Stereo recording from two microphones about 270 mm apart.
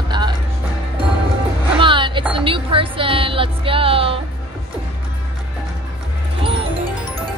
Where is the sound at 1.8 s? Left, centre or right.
Centre.